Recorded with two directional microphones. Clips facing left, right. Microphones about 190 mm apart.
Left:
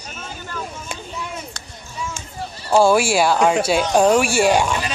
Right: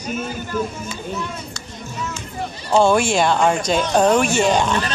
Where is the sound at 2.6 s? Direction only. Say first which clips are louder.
Left 1 dB; 10° left (ahead or behind).